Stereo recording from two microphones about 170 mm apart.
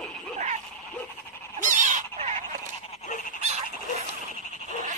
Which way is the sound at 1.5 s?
50° right (ahead or behind).